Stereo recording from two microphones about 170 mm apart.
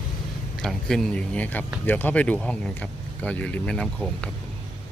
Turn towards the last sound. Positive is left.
turn(degrees=5)  # may be behind; listen again after turning